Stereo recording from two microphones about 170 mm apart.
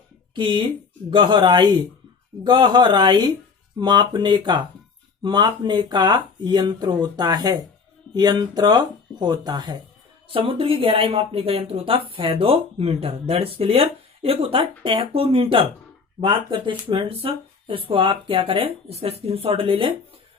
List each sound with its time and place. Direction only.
0.3 s speech: 30° right (ahead or behind)